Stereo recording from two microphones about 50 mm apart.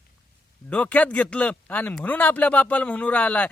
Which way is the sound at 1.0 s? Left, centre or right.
Left.